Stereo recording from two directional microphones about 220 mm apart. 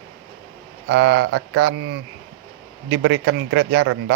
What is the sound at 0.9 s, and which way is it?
Speech, 55° right (ahead or behind).